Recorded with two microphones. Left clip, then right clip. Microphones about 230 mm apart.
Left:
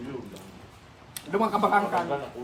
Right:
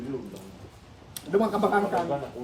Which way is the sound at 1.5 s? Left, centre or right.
Left.